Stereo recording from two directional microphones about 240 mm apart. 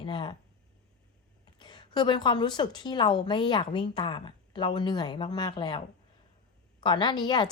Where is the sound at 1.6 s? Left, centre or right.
Centre.